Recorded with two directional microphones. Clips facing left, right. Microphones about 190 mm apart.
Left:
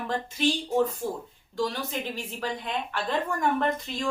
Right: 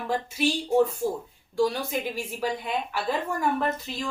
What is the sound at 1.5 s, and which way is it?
A woman's voice, 10° right (ahead or behind).